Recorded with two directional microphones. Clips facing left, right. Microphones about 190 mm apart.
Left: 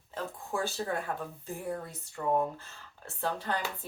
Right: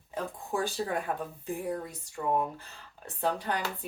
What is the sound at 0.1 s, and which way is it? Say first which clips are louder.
Speech: right 2 dB; 15° right (ahead or behind).